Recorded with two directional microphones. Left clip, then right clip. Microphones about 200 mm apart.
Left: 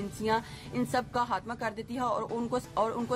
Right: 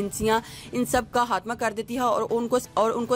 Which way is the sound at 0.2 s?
35° right (ahead or behind).